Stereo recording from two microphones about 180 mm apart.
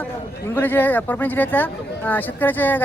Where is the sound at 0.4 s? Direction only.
10° left (ahead or behind).